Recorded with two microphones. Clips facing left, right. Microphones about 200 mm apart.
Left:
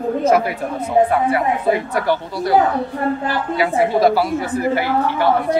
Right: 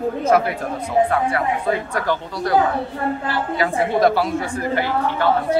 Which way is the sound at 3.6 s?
5° left (ahead or behind).